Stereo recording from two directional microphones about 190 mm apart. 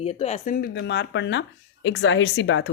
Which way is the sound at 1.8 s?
80° left.